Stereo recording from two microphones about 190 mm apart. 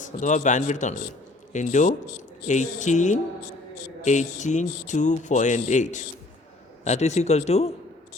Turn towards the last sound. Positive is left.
turn(degrees=35)  # may be behind; listen again after turning